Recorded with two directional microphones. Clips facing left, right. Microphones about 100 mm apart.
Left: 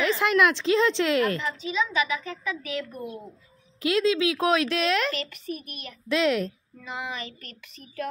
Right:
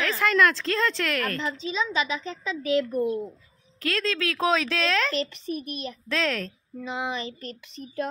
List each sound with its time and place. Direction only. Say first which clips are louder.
0.2 s speech: right 3 dB; 15° left (ahead or behind)
2.0 s child singing: left 1 dB; 25° right (ahead or behind)
3.8 s speech: left 5 dB; 15° left (ahead or behind)
5.1 s child singing: right 4 dB; 30° right (ahead or behind)
6.0 s speech: left 5 dB; 10° left (ahead or behind)
6.8 s child singing: right 4 dB; 25° right (ahead or behind)